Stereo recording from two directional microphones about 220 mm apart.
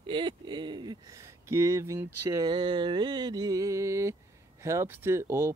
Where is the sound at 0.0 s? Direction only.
20° right (ahead or behind).